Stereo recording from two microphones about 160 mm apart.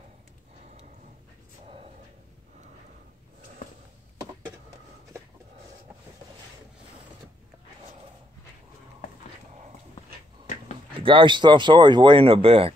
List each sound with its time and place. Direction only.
11.0 s speech: 30° right (ahead or behind)